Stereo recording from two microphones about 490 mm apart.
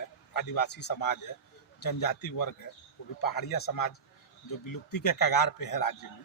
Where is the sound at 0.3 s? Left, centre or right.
Left.